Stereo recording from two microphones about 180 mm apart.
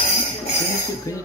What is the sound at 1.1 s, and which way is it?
Speech, 20° left (ahead or behind).